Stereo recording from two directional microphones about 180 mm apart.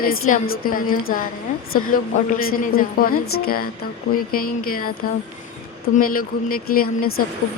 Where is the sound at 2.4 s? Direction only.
55° left (ahead or behind).